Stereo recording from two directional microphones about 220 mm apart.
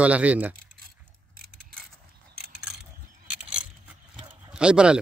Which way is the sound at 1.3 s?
40° right (ahead or behind).